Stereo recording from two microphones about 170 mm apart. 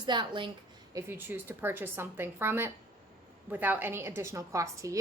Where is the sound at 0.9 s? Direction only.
15° right (ahead or behind).